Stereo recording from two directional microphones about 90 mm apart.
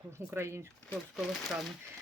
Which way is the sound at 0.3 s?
30° right (ahead or behind).